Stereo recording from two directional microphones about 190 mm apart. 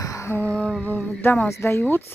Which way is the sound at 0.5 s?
Centre (ahead or behind).